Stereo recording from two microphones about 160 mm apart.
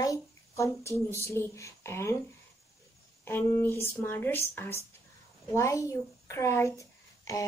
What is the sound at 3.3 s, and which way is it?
Speech, 15° left (ahead or behind).